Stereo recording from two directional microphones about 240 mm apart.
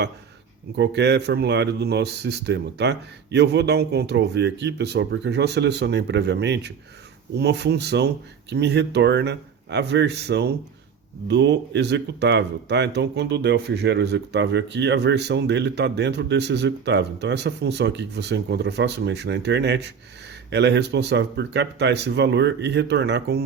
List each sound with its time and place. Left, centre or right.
0.8 s speech: right